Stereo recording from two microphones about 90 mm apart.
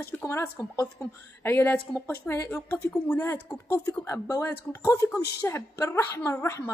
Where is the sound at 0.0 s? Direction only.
25° left (ahead or behind).